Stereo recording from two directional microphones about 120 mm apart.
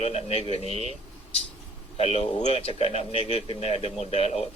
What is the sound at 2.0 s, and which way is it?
A man's voice, 55° left (ahead or behind).